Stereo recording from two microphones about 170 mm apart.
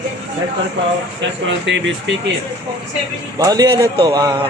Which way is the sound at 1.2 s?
90° right.